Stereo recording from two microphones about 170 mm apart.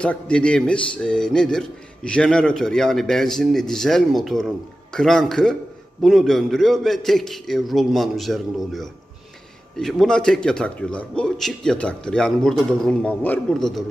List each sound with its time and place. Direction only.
0.0 s a man's voice: 5° left (ahead or behind)